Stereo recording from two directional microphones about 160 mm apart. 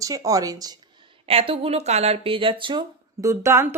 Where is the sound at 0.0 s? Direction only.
20° right (ahead or behind).